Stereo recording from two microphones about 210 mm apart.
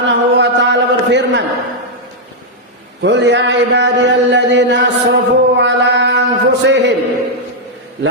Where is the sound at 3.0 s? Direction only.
55° right (ahead or behind).